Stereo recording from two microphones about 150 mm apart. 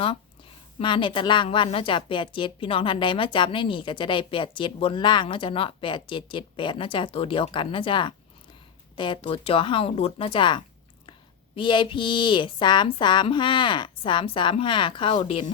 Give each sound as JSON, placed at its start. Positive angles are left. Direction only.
{"t": 0.8, "sound": "a woman's voice", "side_deg": 35}